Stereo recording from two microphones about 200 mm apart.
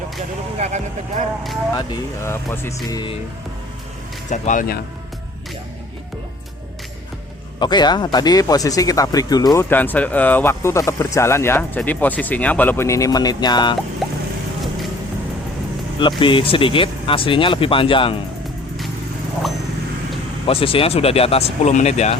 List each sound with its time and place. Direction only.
1.7 s speech: 15° left (ahead or behind)
4.3 s speech: 40° left (ahead or behind)
7.6 s speech: 20° left (ahead or behind)
9.6 s speech: 10° left (ahead or behind)
16.0 s speech: 25° left (ahead or behind)
20.5 s speech: 30° left (ahead or behind)